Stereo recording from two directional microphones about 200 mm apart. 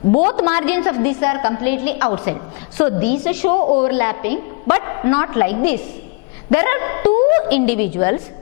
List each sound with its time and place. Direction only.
0.1 s a woman's voice: 10° left (ahead or behind)
3.6 s a woman's voice: 30° left (ahead or behind)
3.8 s a woman's voice: 10° left (ahead or behind)